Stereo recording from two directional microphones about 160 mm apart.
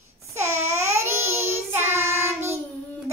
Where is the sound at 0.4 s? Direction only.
15° right (ahead or behind).